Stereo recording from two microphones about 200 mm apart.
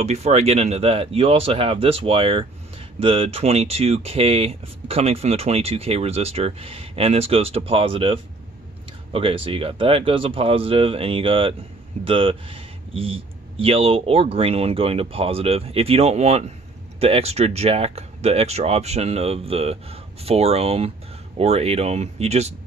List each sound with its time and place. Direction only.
0.0 s speech: 35° right (ahead or behind)